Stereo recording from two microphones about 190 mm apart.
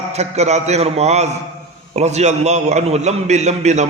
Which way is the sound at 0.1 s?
35° right (ahead or behind).